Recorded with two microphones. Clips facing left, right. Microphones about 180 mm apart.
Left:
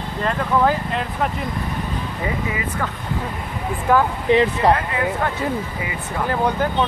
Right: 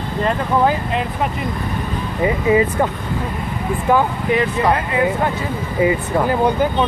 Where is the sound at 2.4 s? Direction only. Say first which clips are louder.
Right 10 dB; 25° right (ahead or behind).